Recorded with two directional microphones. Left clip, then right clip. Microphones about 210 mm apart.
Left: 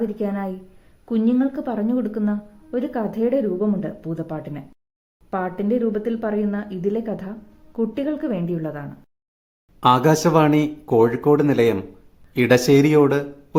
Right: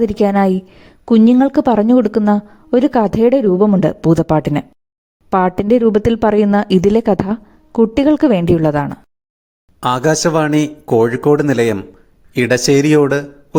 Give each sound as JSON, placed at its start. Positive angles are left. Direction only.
{"t": 0.0, "sound": "a woman's voice", "side_deg": -50}
{"t": 9.8, "sound": "speech", "side_deg": -25}